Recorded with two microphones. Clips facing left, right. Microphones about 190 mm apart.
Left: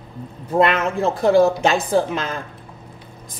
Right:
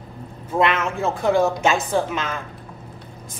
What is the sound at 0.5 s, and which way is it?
Speech, 40° left (ahead or behind).